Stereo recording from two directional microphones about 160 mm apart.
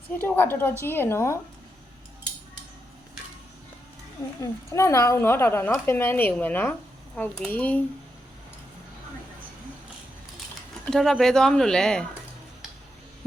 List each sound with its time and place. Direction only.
0.2 s speech: 15° left (ahead or behind)
4.4 s speech: 20° left (ahead or behind)
10.8 s speech: 5° left (ahead or behind)